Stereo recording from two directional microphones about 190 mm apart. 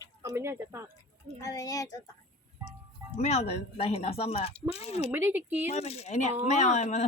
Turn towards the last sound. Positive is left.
turn(degrees=35)  # may be behind; listen again after turning